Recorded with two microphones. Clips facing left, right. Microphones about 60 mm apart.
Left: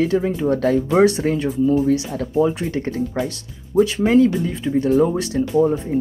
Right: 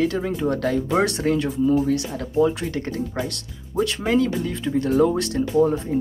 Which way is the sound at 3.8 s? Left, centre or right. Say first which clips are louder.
Left 7 dB; centre.